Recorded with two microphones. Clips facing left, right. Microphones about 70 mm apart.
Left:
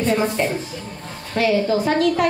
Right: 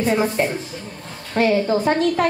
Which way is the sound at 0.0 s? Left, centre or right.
Centre.